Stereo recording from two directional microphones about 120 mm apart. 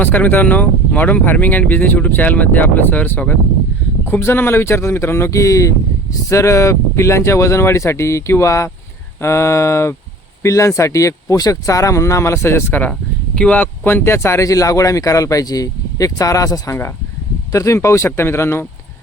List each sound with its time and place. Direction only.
0.0 s speech: 15° left (ahead or behind)
12.9 s speech: 5° left (ahead or behind)